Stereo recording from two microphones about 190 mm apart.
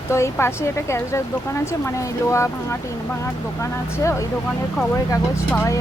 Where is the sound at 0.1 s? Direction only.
15° left (ahead or behind).